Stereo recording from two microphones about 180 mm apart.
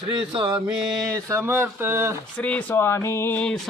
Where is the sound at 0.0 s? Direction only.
30° right (ahead or behind).